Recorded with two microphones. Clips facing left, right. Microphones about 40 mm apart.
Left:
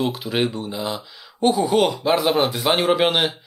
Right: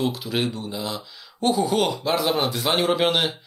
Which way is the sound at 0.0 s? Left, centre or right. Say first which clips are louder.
Left 3 dB; centre.